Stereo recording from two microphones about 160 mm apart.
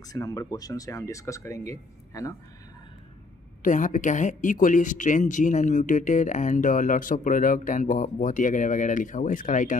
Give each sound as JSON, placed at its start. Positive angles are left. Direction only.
{"t": 0.0, "sound": "speech", "side_deg": 20}
{"t": 3.6, "sound": "speech", "side_deg": 55}